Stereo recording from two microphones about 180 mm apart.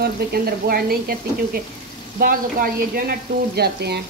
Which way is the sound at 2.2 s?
55° right (ahead or behind).